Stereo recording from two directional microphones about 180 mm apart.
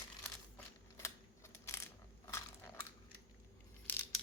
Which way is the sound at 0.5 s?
15° left (ahead or behind).